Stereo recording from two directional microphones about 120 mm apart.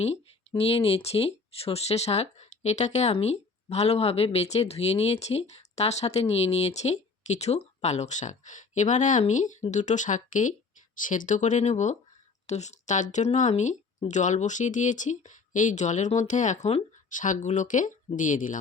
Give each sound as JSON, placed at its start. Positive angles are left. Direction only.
{"t": 0.0, "sound": "speech", "side_deg": 60}
{"t": 14.1, "sound": "speech", "side_deg": 90}